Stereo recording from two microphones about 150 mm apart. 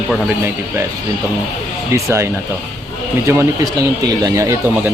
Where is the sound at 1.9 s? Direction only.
20° right (ahead or behind).